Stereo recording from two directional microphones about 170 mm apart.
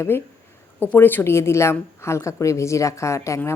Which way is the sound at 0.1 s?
15° left (ahead or behind).